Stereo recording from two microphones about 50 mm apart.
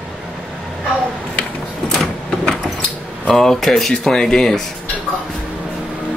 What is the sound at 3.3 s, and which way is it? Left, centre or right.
Speech, centre.